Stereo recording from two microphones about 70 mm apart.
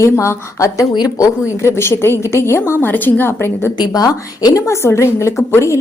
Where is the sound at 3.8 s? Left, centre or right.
Left.